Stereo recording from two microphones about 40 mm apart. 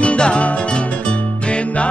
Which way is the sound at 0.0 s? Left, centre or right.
Left.